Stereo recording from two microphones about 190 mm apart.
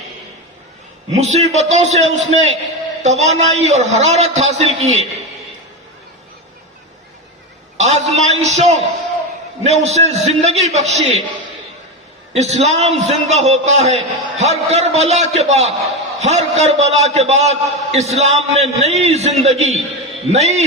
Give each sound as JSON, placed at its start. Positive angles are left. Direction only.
{"t": 1.1, "sound": "a man's voice", "side_deg": -35}
{"t": 7.8, "sound": "a man's voice", "side_deg": -35}
{"t": 12.3, "sound": "a man's voice", "side_deg": -35}